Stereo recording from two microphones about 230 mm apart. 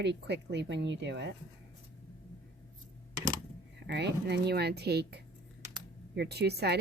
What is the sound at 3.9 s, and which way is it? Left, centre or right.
A woman's voice, right.